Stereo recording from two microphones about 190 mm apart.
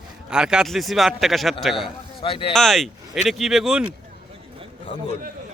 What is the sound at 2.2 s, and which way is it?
Speech, 30° left (ahead or behind).